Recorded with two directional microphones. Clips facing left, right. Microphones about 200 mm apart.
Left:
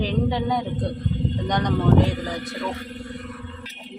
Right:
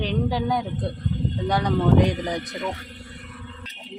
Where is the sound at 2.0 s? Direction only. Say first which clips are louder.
Right 2 dB; 20° right (ahead or behind).